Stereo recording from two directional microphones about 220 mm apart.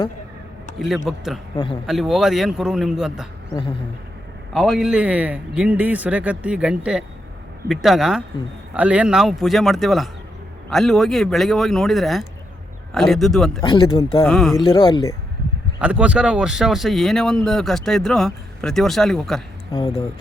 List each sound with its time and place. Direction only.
1.0 s speech: centre (ahead or behind)
1.5 s speech: 20° left (ahead or behind)
1.9 s speech: centre (ahead or behind)
4.5 s speech: centre (ahead or behind)
13.6 s speech: 20° left (ahead or behind)
14.3 s speech: centre (ahead or behind)
14.6 s speech: 25° left (ahead or behind)
15.8 s speech: 5° right (ahead or behind)
19.7 s speech: 25° left (ahead or behind)